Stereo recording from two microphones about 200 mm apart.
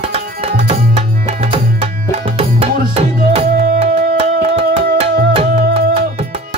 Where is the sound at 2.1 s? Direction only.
25° right (ahead or behind).